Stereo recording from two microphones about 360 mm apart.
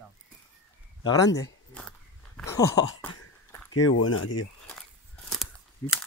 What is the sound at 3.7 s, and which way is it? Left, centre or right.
Speech, left.